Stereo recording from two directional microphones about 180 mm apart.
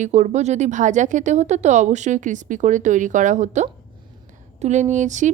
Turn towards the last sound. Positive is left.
turn(degrees=-45)  # may be behind; listen again after turning